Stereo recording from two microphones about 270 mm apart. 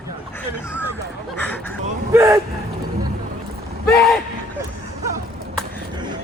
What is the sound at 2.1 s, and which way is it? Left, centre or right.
Speech, centre.